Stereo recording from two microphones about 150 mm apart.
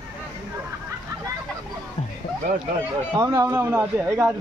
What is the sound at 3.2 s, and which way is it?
A man's voice, 20° right (ahead or behind).